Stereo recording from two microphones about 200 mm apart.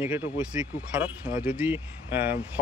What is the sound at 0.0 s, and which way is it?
Speech, 10° right (ahead or behind).